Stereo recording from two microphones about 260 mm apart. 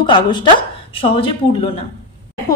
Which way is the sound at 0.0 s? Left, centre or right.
Centre.